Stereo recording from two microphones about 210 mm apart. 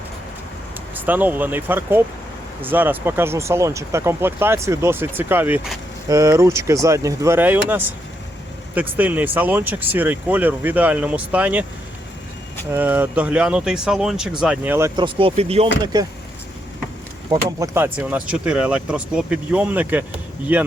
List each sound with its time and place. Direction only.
0.9 s speech: 10° right (ahead or behind)
8.7 s speech: 10° right (ahead or behind)
12.7 s speech: 10° right (ahead or behind); by 15.7 s 30° right (ahead or behind)
15.8 s speech: 20° right (ahead or behind)
17.3 s speech: 15° right (ahead or behind)